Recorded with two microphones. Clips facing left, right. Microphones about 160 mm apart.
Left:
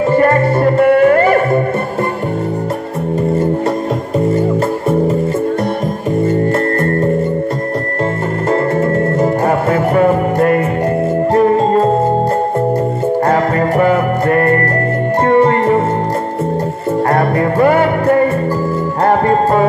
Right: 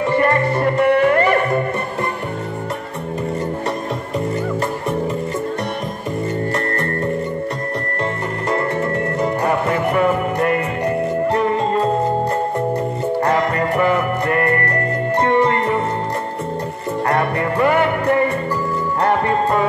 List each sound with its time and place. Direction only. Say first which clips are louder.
0.1 s music: left 5 dB; 40° left (ahead or behind)
6.8 s music: left 8 dB; 35° left (ahead or behind)
9.2 s music: left 3 dB; 40° left (ahead or behind)
13.3 s music: left 5 dB; 40° left (ahead or behind)
17.1 s music: left 4 dB; 40° left (ahead or behind)